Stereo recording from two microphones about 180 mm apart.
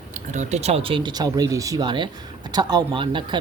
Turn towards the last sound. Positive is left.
turn(degrees=-25)  # may be behind; listen again after turning